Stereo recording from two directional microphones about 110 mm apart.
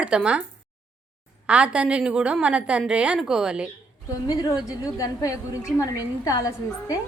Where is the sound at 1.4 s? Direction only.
10° right (ahead or behind).